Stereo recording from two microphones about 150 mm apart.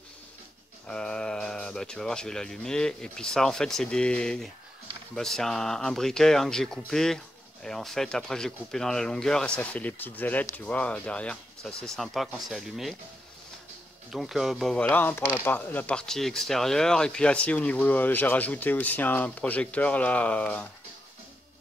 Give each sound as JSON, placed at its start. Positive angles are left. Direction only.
{"t": 0.8, "sound": "speech", "side_deg": 5}
{"t": 14.1, "sound": "speech", "side_deg": 0}
{"t": 14.9, "sound": "speech", "side_deg": 15}